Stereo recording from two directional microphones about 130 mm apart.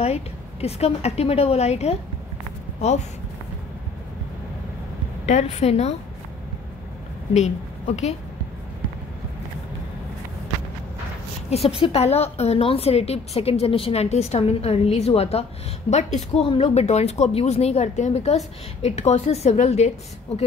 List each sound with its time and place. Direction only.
0.0 s a woman's voice: 55° left (ahead or behind)
5.2 s a woman's voice: 55° left (ahead or behind)
7.3 s a woman's voice: 60° left (ahead or behind)
11.8 s a woman's voice: 55° left (ahead or behind)
15.9 s a woman's voice: 60° left (ahead or behind)
16.4 s a woman's voice: 45° left (ahead or behind)